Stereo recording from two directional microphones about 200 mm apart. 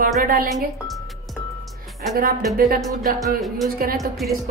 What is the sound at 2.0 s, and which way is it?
A woman's voice, 45° right (ahead or behind).